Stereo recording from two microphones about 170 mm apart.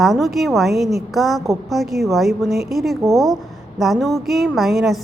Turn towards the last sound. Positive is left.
turn(degrees=0)  # may be behind; listen again after turning